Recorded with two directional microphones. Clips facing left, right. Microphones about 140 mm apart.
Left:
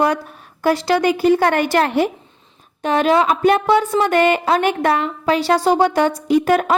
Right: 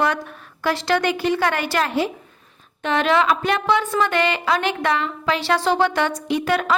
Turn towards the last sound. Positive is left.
turn(degrees=40)  # may be behind; listen again after turning